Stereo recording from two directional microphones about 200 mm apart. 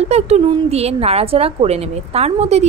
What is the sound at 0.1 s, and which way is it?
A woman's voice, 30° right (ahead or behind).